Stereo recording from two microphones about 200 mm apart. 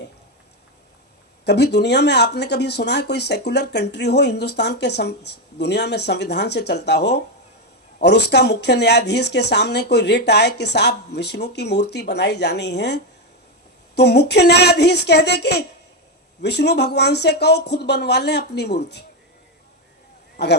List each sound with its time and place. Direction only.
1.5 s speech: 55° left (ahead or behind)
20.3 s speech: 55° left (ahead or behind)